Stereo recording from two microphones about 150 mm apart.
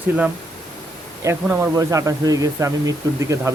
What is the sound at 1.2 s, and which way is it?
Speech, 15° right (ahead or behind).